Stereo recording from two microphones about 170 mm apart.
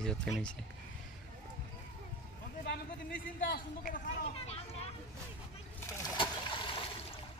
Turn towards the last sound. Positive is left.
turn(degrees=30)  # may be behind; listen again after turning